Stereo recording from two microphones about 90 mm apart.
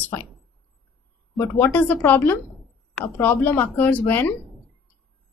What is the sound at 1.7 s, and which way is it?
A woman's voice, 20° left (ahead or behind).